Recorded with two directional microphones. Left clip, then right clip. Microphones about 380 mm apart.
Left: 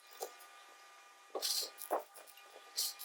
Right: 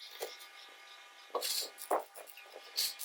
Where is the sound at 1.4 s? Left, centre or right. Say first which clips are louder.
Even; centre.